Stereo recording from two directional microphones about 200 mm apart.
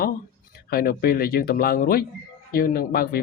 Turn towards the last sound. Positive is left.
turn(degrees=50)  # may be behind; listen again after turning